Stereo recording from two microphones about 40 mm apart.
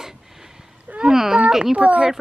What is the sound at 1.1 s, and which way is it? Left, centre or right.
Speech, centre.